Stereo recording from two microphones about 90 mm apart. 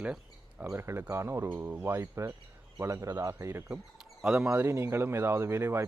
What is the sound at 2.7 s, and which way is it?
Speech, 30° right (ahead or behind).